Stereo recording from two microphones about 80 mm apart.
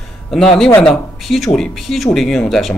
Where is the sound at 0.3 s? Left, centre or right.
Centre.